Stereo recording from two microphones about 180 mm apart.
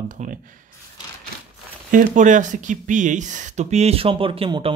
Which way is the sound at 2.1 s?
45° right (ahead or behind).